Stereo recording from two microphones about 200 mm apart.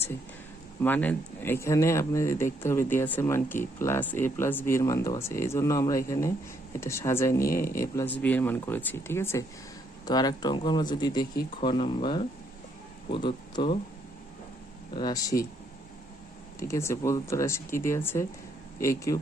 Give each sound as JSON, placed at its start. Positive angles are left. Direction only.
{"t": 0.8, "sound": "speech", "side_deg": 10}
{"t": 14.9, "sound": "speech", "side_deg": 20}
{"t": 16.6, "sound": "speech", "side_deg": 15}